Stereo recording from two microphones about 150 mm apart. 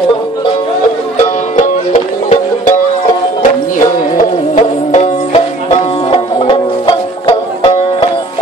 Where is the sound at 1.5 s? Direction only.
55° left (ahead or behind).